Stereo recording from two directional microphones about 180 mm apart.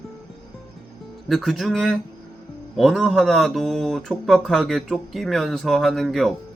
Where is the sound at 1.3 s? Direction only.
Centre (ahead or behind).